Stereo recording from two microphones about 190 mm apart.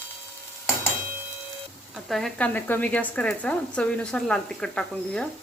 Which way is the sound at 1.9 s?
Centre (ahead or behind).